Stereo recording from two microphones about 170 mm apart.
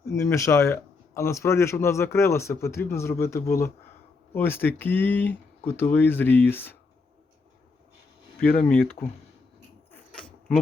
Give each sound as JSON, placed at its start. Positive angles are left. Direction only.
{"t": 0.0, "sound": "speech", "side_deg": 15}
{"t": 8.7, "sound": "speech", "side_deg": 5}
{"t": 10.1, "sound": "a sound", "side_deg": 5}